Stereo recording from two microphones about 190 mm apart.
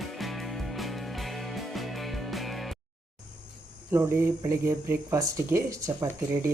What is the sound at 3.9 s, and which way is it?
Speech, 10° right (ahead or behind).